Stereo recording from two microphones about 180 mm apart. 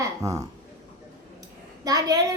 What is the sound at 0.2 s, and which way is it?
Speech, 20° right (ahead or behind).